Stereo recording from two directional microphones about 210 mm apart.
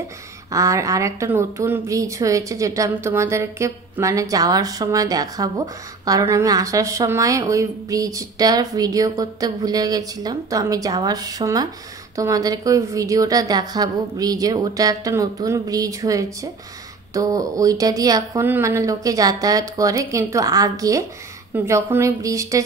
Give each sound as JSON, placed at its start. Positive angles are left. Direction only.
{"t": 0.5, "sound": "speech", "side_deg": -15}